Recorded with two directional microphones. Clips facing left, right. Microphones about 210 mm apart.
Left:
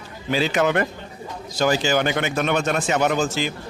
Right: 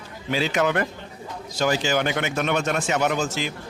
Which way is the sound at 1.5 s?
35° left (ahead or behind).